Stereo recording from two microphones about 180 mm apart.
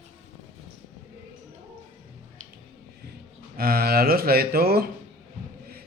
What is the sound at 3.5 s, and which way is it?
A man's voice, 55° right (ahead or behind).